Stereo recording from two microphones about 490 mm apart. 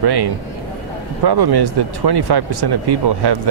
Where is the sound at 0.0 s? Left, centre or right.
Right.